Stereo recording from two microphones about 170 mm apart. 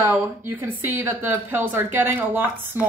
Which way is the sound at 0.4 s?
10° right (ahead or behind).